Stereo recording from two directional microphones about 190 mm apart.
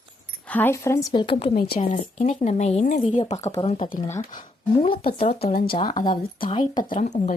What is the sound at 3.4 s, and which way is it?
Speech, 15° left (ahead or behind).